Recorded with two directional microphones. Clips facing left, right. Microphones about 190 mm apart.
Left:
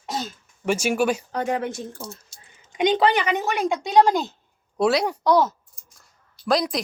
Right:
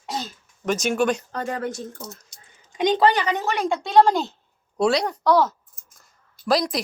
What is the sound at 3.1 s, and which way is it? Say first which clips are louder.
Speech: even; 15° left (ahead or behind).